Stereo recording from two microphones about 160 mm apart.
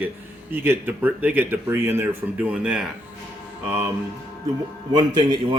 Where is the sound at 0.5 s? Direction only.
15° right (ahead or behind).